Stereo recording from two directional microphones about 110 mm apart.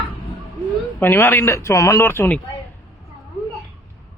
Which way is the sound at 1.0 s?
20° left (ahead or behind).